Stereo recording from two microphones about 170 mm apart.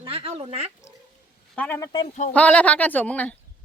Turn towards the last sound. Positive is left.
turn(degrees=10)  # may be behind; listen again after turning